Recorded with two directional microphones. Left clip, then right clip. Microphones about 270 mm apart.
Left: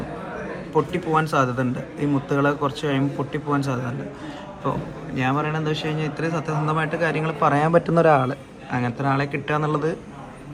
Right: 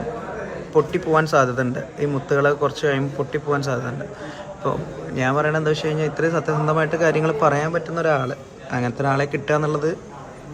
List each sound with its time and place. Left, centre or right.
0.7 s a man's voice: centre
5.1 s a man's voice: centre